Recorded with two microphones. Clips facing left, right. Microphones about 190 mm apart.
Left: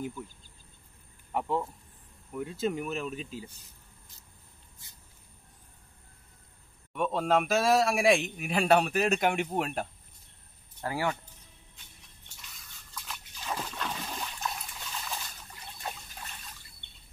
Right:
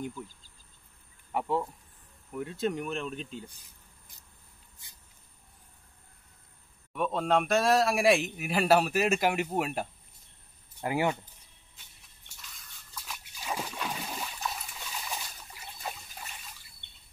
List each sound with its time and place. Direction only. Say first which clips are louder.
1.3 s speech: right 1 dB; 5° right (ahead or behind)
6.9 s speech: even; centre (ahead or behind)
10.8 s speech: right 3 dB; 20° right (ahead or behind)
12.5 s trickle: left 1 dB; 5° right (ahead or behind)